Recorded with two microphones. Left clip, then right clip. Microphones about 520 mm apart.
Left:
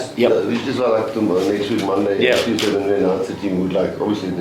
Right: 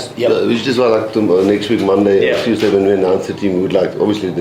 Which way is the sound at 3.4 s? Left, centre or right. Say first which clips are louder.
Right 6 dB; right.